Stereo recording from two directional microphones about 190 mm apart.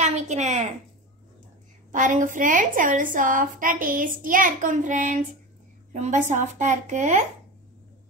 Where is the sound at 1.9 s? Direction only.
40° right (ahead or behind).